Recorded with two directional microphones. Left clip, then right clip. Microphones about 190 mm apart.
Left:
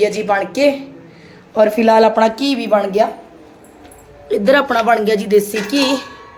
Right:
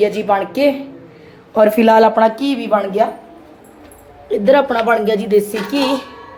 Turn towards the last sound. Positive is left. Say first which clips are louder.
# left 1 dB
turn(degrees=0)  # may be behind; listen again after turning